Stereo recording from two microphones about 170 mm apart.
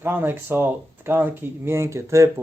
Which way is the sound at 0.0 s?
10° right (ahead or behind).